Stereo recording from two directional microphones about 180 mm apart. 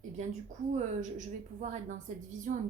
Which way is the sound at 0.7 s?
45° right (ahead or behind).